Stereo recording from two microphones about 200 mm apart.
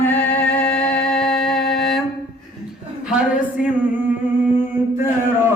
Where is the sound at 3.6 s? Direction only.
10° right (ahead or behind).